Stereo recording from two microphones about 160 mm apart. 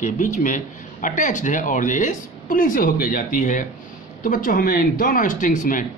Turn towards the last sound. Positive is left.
turn(degrees=55)  # may be behind; listen again after turning